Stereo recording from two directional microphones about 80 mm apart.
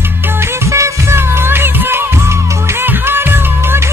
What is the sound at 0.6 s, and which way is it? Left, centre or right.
Music, right.